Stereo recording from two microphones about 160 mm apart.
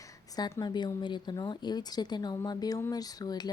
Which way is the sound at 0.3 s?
25° left (ahead or behind).